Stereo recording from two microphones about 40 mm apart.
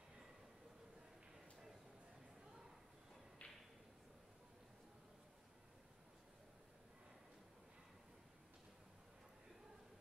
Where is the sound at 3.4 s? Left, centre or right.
Left.